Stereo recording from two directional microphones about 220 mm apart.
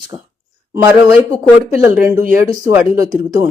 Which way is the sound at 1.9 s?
10° right (ahead or behind).